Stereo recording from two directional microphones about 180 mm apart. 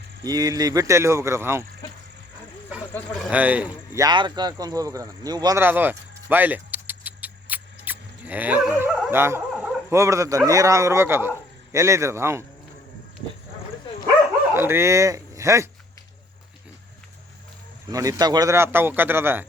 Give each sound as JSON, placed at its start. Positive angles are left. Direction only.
{"t": 0.3, "sound": "a man's voice", "side_deg": -20}
{"t": 3.1, "sound": "a man's voice", "side_deg": 0}
{"t": 4.0, "sound": "a man's voice", "side_deg": -25}
{"t": 14.5, "sound": "speech", "side_deg": -15}
{"t": 17.9, "sound": "a man's voice", "side_deg": -20}